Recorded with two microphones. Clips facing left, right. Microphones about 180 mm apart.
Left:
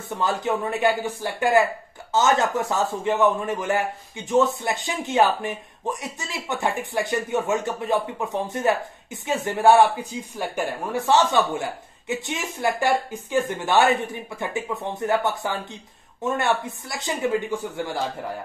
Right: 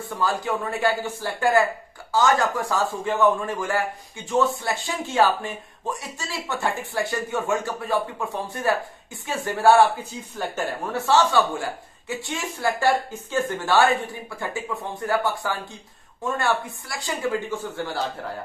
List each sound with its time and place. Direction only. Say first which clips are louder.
0.0 s speech: left 1 dB; 20° left (ahead or behind)